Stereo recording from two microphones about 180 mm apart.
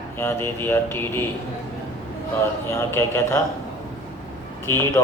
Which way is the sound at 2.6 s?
15° left (ahead or behind).